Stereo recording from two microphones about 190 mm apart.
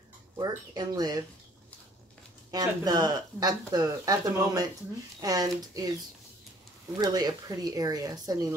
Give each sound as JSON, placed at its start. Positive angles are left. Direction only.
{"t": 0.4, "sound": "speech", "side_deg": -20}
{"t": 2.5, "sound": "speech", "side_deg": -20}
{"t": 7.0, "sound": "speech", "side_deg": -20}